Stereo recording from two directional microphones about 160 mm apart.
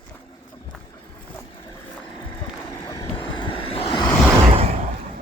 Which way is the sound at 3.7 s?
30° left (ahead or behind).